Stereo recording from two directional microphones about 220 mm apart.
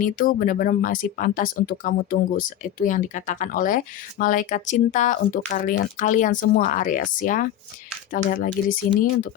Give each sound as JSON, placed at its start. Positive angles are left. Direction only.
{"t": 0.0, "sound": "speech", "side_deg": 40}